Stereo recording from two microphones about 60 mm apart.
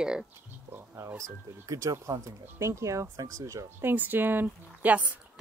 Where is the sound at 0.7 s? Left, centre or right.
Right.